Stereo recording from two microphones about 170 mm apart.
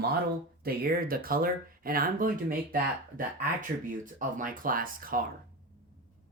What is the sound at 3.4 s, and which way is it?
Speech, 55° right (ahead or behind).